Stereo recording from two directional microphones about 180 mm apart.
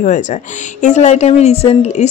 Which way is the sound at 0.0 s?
45° left (ahead or behind).